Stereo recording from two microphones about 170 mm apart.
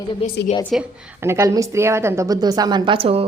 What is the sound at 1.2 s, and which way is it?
A woman's voice, 15° right (ahead or behind).